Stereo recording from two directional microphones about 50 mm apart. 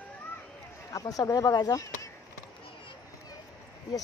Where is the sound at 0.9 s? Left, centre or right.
Left.